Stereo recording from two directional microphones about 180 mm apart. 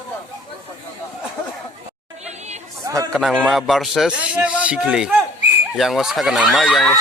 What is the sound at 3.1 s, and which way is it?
A man's voice, centre (ahead or behind).